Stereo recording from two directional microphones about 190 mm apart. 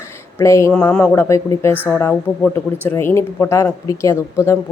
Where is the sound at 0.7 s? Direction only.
5° left (ahead or behind).